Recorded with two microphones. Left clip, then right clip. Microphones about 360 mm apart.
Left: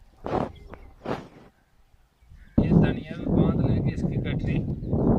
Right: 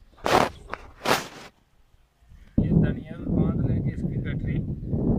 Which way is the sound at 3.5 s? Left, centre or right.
Left.